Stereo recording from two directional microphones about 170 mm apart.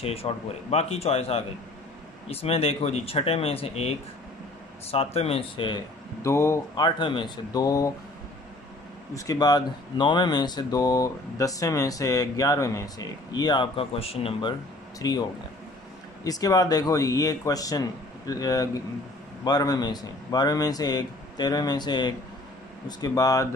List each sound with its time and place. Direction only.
0.0 s speech: 35° left (ahead or behind)
4.9 s speech: 35° left (ahead or behind); by 6.6 s 15° left (ahead or behind)
6.7 s speech: 30° left (ahead or behind)
9.1 s speech: 20° left (ahead or behind)
15.0 s speech: 25° left (ahead or behind)
16.3 s speech: 20° left (ahead or behind)